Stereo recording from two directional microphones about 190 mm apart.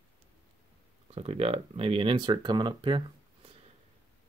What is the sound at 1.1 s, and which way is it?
Speech, 30° right (ahead or behind).